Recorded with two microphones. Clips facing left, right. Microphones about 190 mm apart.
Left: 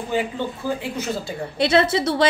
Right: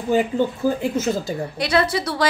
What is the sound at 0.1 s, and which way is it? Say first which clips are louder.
Speech: right 4 dB; 45° right (ahead or behind).